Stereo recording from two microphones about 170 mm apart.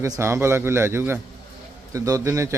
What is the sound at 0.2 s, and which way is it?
A man's voice, 15° right (ahead or behind).